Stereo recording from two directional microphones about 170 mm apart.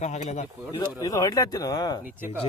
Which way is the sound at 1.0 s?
20° left (ahead or behind).